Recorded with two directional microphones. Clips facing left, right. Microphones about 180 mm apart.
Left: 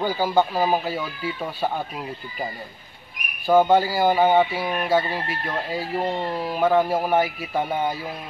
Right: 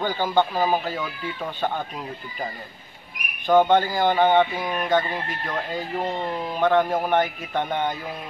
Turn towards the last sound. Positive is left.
turn(degrees=5)  # may be behind; listen again after turning